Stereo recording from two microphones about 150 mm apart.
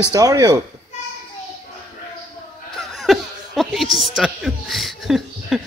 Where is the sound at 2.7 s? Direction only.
Centre (ahead or behind).